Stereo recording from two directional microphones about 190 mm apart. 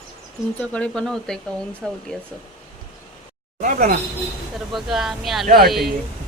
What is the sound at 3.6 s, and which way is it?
Speech, 45° right (ahead or behind).